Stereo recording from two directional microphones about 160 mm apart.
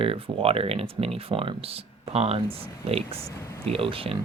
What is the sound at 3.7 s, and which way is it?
Speech, 35° right (ahead or behind).